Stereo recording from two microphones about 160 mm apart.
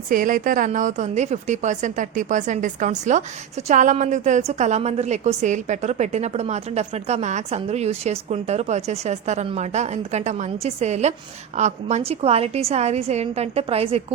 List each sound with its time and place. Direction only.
0.1 s a woman's voice: 60° right (ahead or behind); by 14.0 s 40° right (ahead or behind)